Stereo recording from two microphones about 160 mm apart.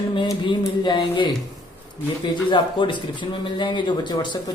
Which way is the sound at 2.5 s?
30° left (ahead or behind).